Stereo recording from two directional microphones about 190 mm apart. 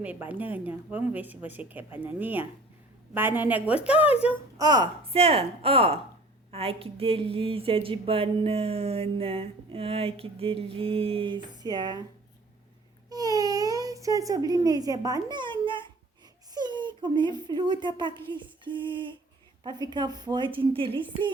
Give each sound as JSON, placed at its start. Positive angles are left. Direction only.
{"t": 0.0, "sound": "speech", "side_deg": -10}
{"t": 4.5, "sound": "speech", "side_deg": -20}
{"t": 13.1, "sound": "a sound", "side_deg": -20}
{"t": 16.6, "sound": "speech", "side_deg": -25}